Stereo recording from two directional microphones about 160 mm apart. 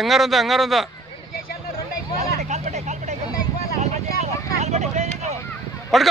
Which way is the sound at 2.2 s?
45° right (ahead or behind).